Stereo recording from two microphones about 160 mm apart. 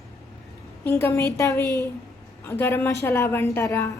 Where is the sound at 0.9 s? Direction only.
15° left (ahead or behind).